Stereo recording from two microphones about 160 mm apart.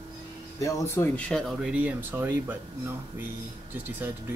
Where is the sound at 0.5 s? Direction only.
20° left (ahead or behind).